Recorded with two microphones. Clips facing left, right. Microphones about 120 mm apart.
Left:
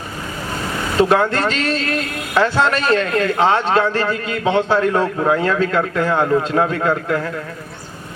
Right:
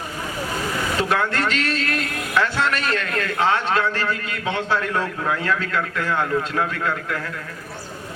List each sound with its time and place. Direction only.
0.9 s speech: 30° left (ahead or behind)